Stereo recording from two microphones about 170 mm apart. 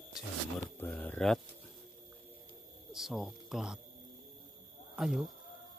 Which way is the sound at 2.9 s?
Centre (ahead or behind).